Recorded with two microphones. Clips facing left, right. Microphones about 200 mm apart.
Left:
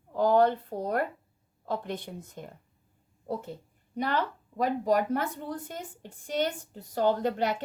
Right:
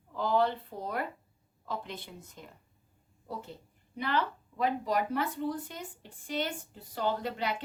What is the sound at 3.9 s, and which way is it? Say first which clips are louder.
A woman's voice: left 2 dB; 50° left (ahead or behind).